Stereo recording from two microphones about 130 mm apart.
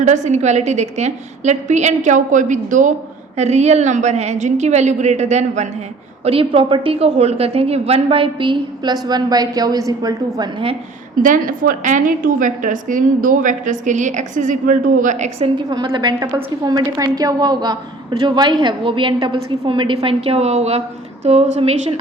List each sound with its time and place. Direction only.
0.0 s a woman's voice: 65° right (ahead or behind)
3.3 s a woman's voice: 60° right (ahead or behind)
6.2 s a woman's voice: 45° right (ahead or behind); by 10.5 s 30° right (ahead or behind)
11.2 s a woman's voice: 90° right; by 15.4 s 65° right (ahead or behind)
15.5 s a woman's voice: 35° right (ahead or behind)